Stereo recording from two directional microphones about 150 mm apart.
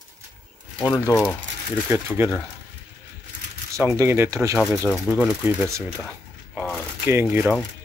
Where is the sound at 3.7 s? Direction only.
15° right (ahead or behind).